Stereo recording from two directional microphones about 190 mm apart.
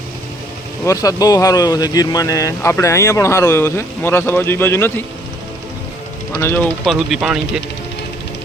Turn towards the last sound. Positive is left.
turn(degrees=0)  # may be behind; listen again after turning